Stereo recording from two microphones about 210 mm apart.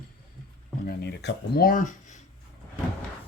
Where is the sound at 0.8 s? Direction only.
55° left (ahead or behind).